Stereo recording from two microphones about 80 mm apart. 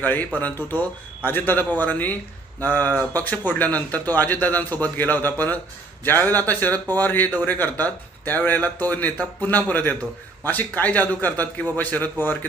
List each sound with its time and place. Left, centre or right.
0.0 s speech: left